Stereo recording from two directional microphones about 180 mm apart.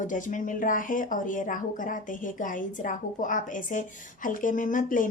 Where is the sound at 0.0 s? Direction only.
45° left (ahead or behind).